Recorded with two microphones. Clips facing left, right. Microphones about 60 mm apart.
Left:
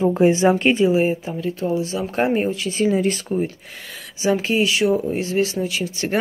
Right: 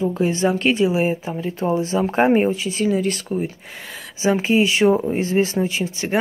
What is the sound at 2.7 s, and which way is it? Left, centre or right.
Speech, centre.